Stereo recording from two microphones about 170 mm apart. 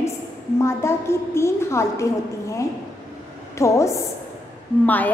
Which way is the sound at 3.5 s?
15° left (ahead or behind).